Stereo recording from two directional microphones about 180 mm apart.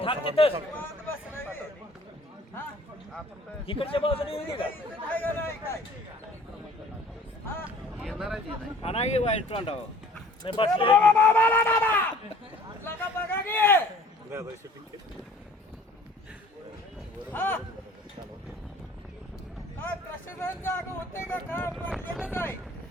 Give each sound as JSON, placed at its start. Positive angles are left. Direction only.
{"t": 0.0, "sound": "a man's voice", "side_deg": 30}
{"t": 0.8, "sound": "a sound", "side_deg": 10}
{"t": 3.7, "sound": "a man's voice", "side_deg": 30}
{"t": 5.1, "sound": "chatter", "side_deg": 10}
{"t": 8.0, "sound": "a sound", "side_deg": 0}
{"t": 8.8, "sound": "a man's voice", "side_deg": 35}
{"t": 10.9, "sound": "speech", "side_deg": 10}
{"t": 12.8, "sound": "a sound", "side_deg": 10}
{"t": 14.3, "sound": "speech", "side_deg": -15}
{"t": 17.3, "sound": "speech", "side_deg": 10}
{"t": 20.4, "sound": "speech", "side_deg": 10}